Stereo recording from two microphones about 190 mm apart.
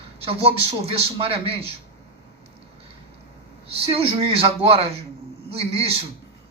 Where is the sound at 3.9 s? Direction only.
30° right (ahead or behind).